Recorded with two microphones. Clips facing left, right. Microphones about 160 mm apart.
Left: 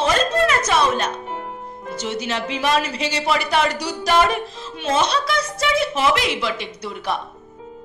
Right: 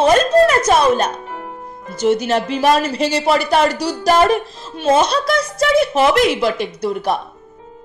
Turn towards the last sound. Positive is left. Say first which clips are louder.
# right 7 dB
turn(degrees=-45)  # may be behind; listen again after turning